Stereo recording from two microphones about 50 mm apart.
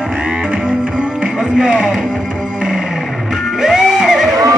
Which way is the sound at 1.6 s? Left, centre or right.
Centre.